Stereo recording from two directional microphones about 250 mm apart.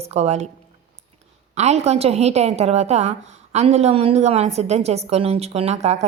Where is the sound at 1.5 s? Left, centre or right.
Right.